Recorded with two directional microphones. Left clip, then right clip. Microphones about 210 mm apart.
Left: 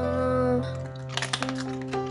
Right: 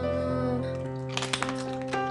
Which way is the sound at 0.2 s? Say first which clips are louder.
Left 5 dB; 15° left (ahead or behind).